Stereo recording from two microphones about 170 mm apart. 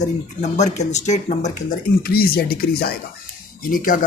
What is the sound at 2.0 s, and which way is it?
Speech, 60° left (ahead or behind).